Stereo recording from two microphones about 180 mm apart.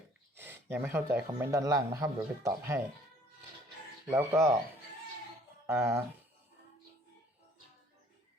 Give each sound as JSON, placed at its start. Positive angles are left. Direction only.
{"t": 0.3, "sound": "speech", "side_deg": -10}
{"t": 4.1, "sound": "speech", "side_deg": -15}
{"t": 5.6, "sound": "speech", "side_deg": -15}